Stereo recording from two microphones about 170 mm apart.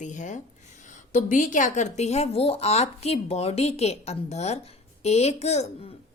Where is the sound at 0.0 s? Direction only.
45° left (ahead or behind).